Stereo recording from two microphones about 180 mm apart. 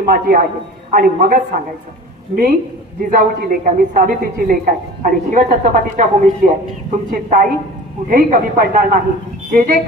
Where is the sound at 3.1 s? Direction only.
50° right (ahead or behind).